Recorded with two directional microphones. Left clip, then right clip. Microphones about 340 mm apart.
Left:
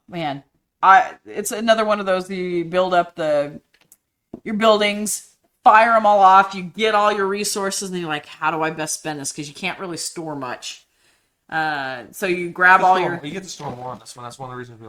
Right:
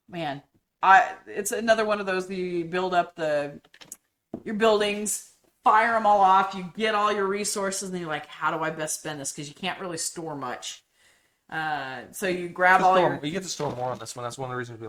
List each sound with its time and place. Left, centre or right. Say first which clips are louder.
0.1 s speech: left 6 dB; left
13.2 s speech: even; right